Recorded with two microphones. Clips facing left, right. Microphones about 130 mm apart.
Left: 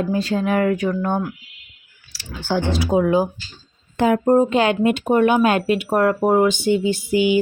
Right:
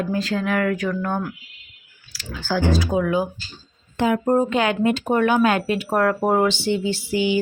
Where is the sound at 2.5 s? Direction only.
25° left (ahead or behind).